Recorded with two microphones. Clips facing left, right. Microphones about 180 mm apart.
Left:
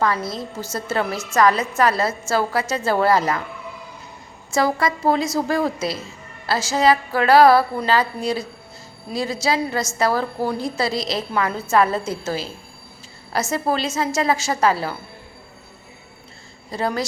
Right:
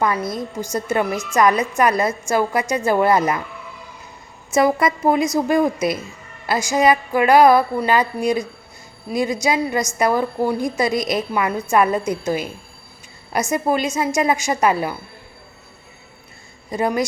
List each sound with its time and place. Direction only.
0.6 s a woman's voice: 15° right (ahead or behind)
4.5 s a woman's voice: 20° right (ahead or behind)
16.7 s a woman's voice: 15° right (ahead or behind)